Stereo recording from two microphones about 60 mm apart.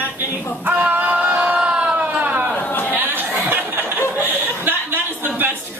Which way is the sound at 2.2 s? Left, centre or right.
Right.